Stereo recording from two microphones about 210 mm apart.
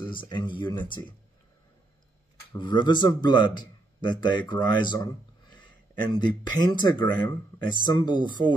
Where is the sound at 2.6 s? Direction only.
20° left (ahead or behind).